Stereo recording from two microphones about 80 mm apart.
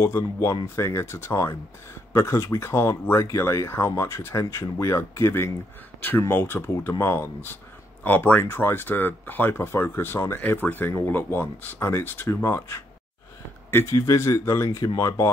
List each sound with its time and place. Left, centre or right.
0.0 s a man's voice: left
13.9 s speech: left